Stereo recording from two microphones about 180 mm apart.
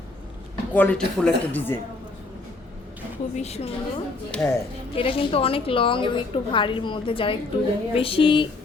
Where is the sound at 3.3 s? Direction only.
35° left (ahead or behind).